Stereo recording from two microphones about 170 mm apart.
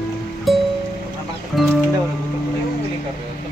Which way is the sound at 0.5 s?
Centre (ahead or behind).